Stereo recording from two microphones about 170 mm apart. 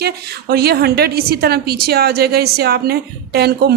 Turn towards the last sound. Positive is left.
turn(degrees=-70)  # may be behind; listen again after turning